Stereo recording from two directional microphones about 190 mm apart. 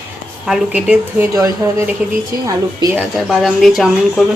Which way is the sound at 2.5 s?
15° right (ahead or behind).